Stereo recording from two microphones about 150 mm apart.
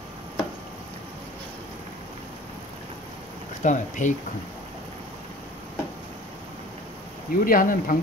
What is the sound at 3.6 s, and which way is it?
Speech, 55° left (ahead or behind).